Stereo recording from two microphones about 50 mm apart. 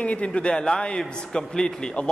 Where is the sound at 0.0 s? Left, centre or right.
Left.